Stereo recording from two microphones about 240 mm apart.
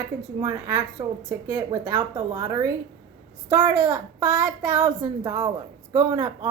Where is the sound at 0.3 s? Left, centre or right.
Centre.